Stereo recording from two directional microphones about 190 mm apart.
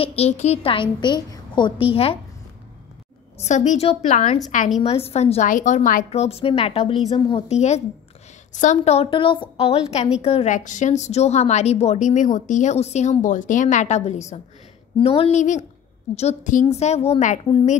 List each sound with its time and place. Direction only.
0.0 s a woman's voice: 35° left (ahead or behind)
3.3 s a woman's voice: 40° left (ahead or behind)
4.8 s a woman's voice: 30° left (ahead or behind)